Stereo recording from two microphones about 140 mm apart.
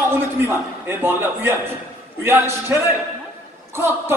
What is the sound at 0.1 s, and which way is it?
A woman's voice, 15° right (ahead or behind).